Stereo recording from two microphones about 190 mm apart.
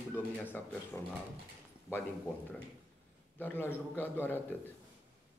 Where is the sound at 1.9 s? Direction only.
15° left (ahead or behind).